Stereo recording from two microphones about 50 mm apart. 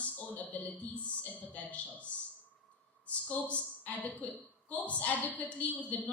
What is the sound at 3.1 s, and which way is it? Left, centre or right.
A woman's voice, left.